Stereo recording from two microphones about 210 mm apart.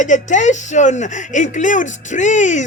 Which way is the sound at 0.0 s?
35° left (ahead or behind).